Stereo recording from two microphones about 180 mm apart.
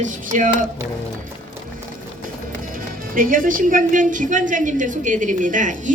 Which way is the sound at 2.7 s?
50° right (ahead or behind).